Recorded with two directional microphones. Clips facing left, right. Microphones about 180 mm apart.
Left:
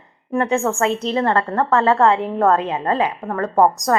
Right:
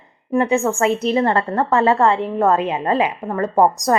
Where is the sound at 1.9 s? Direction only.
Centre (ahead or behind).